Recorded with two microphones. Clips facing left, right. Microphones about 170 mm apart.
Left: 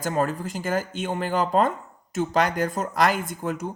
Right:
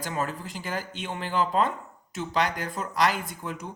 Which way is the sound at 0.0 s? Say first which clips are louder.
Left 6 dB; 45° left (ahead or behind).